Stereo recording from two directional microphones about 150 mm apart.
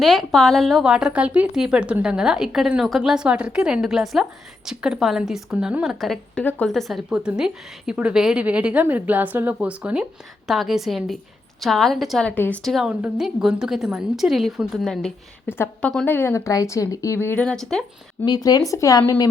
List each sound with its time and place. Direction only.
0.0 s a woman's voice: centre (ahead or behind)
12.3 s a woman's voice: 10° left (ahead or behind)
12.7 s a woman's voice: 5° right (ahead or behind)
15.4 s a woman's voice: 15° left (ahead or behind)
17.4 s a woman's voice: 5° left (ahead or behind)
18.3 s speech: 25° left (ahead or behind)